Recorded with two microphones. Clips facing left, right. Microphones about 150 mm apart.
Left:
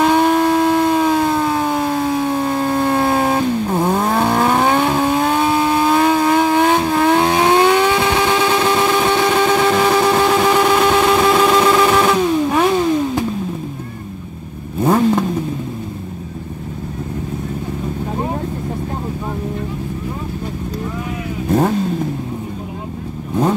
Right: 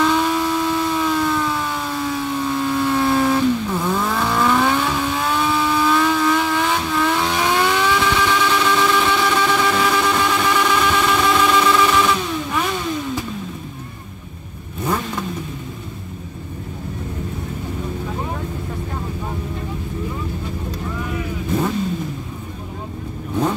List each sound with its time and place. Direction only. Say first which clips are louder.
0.0 s civil defense siren: left 5 dB; 50° left (ahead or behind)
3.4 s vehicle: left 3 dB; 45° left (ahead or behind)
9.7 s vehicle: left 5 dB; 30° left (ahead or behind)
14.8 s vehicle: left 9 dB; 45° left (ahead or behind)